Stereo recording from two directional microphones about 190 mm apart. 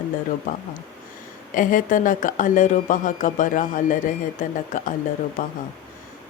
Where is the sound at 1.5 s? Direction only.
45° left (ahead or behind).